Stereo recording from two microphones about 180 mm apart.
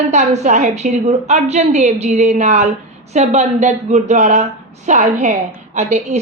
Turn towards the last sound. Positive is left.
turn(degrees=-40)  # may be behind; listen again after turning